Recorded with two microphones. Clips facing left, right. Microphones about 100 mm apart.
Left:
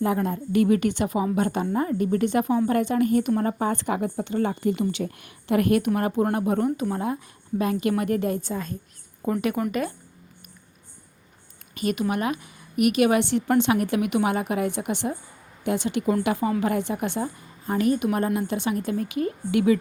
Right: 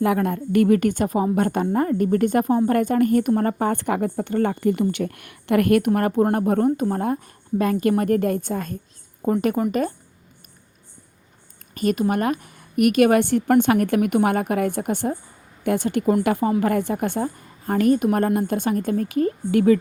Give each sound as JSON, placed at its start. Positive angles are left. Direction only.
{"t": 0.0, "sound": "a woman's voice", "side_deg": -65}
{"t": 11.7, "sound": "a woman's voice", "side_deg": -45}